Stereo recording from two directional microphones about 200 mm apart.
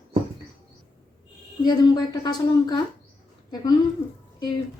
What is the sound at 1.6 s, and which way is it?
A woman's voice, 20° left (ahead or behind).